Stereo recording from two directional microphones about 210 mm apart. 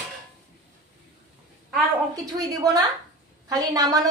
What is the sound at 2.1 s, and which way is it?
A woman's voice, 15° right (ahead or behind).